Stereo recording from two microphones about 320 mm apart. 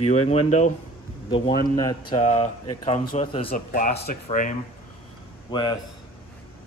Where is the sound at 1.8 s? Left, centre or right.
Centre.